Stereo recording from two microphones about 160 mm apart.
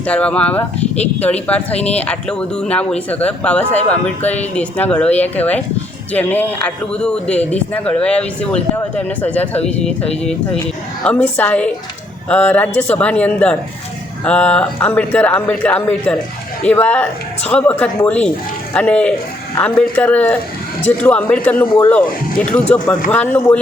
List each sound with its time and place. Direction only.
0.0 s speech: 5° left (ahead or behind)
1.7 s speech: 40° left (ahead or behind)
2.0 s speech: 5° left (ahead or behind)
11.0 s speech: 10° left (ahead or behind)